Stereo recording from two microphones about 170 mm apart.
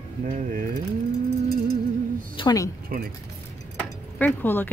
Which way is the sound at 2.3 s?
20° left (ahead or behind).